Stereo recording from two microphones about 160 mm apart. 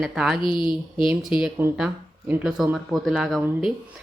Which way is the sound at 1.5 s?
10° right (ahead or behind).